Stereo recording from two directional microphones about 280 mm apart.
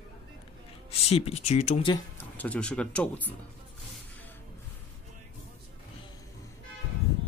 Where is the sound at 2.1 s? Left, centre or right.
Centre.